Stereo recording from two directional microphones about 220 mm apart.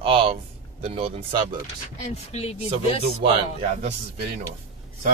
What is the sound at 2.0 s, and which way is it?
Speech, 30° left (ahead or behind).